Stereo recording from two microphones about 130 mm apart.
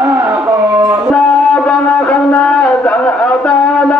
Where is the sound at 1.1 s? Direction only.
5° left (ahead or behind).